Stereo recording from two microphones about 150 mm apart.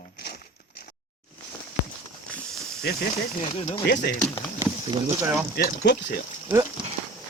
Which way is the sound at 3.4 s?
50° left (ahead or behind).